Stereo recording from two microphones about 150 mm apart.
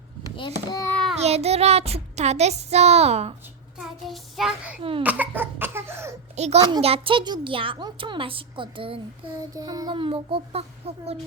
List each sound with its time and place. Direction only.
0.7 s a child's voice: 20° left (ahead or behind)
1.1 s child singing: 45° right (ahead or behind)
3.8 s child singing: centre (ahead or behind)
4.8 s a woman's voice: 35° right (ahead or behind)
5.0 s cough: 10° right (ahead or behind)
6.3 s a child's voice: 45° right (ahead or behind)
6.6 s a child's voice: 30° right (ahead or behind)
9.6 s a woman's voice: 25° right (ahead or behind); by 11.2 s 40° right (ahead or behind)